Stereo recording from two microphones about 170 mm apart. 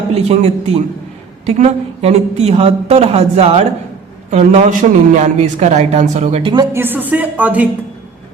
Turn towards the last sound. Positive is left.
turn(degrees=-10)  # may be behind; listen again after turning